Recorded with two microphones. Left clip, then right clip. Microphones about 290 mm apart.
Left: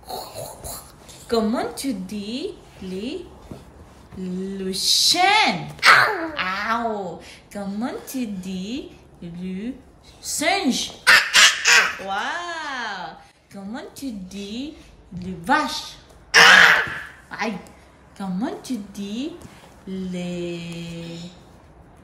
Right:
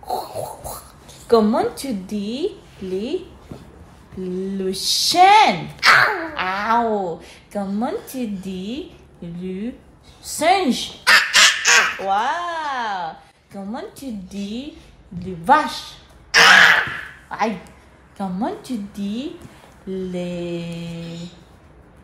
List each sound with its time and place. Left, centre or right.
0.0 s a sound: centre
1.2 s speech: centre
4.2 s speech: centre
5.8 s a sound: centre
6.3 s speech: centre
11.1 s duck: centre
12.0 s a woman's voice: centre
15.1 s speech: centre
16.3 s throat clearing: centre
17.3 s a woman's voice: centre